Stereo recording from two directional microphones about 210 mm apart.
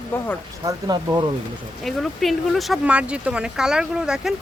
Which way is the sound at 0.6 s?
20° right (ahead or behind).